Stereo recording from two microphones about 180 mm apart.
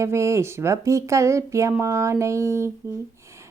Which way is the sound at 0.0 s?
15° right (ahead or behind).